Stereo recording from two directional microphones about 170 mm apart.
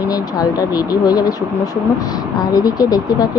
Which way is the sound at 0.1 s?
20° left (ahead or behind).